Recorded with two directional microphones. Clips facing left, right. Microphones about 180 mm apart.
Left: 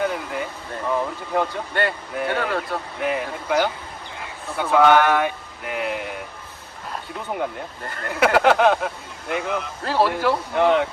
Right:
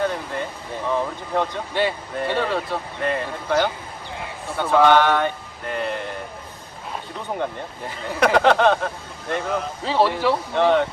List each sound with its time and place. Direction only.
0.0 s speech: 5° left (ahead or behind)